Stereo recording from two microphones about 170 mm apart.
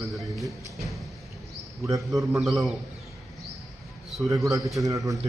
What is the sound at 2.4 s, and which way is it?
Speech, centre (ahead or behind).